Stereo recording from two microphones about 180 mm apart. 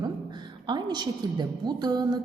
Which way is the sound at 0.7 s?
25° right (ahead or behind).